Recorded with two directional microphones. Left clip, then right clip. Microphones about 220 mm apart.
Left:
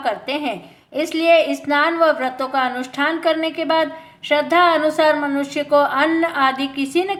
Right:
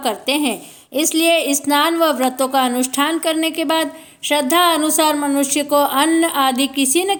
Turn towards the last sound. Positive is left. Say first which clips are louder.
# right 3 dB
turn(degrees=-50)  # may be behind; listen again after turning